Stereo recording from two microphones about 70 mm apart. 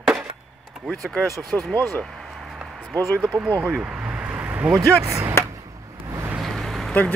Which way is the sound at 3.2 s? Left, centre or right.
Centre.